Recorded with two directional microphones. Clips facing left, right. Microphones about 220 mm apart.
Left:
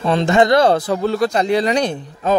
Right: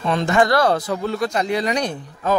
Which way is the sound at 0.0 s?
30° left (ahead or behind).